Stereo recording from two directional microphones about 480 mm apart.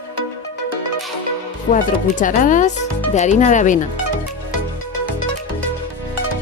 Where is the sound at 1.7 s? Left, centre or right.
Centre.